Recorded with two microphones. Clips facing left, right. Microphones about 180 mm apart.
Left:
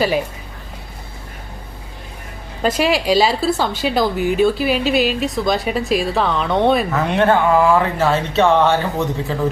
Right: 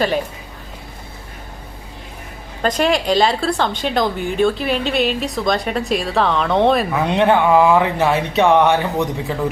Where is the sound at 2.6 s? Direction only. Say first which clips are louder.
Even; 5° left (ahead or behind).